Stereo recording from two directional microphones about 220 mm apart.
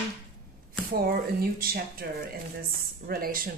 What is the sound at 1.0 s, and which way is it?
Speech, 45° right (ahead or behind).